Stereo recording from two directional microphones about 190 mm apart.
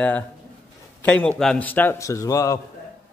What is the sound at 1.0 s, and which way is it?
A man's voice, 5° left (ahead or behind).